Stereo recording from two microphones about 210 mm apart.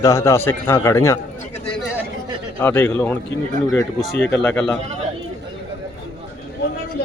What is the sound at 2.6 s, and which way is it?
A man's voice, 10° left (ahead or behind).